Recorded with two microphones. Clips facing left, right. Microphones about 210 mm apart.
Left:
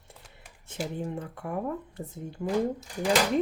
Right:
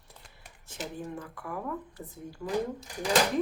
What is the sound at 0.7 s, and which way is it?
Speech, 25° left (ahead or behind).